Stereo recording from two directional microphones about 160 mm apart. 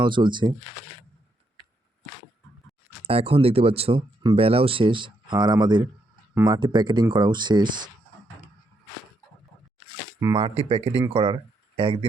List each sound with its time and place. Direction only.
0.0 s speech: 30° right (ahead or behind)
3.1 s speech: 35° right (ahead or behind)
10.3 s speech: 35° right (ahead or behind)